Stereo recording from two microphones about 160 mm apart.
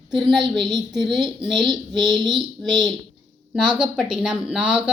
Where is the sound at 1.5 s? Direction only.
30° right (ahead or behind).